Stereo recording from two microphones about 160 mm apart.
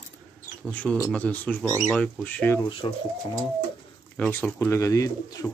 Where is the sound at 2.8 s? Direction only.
35° left (ahead or behind).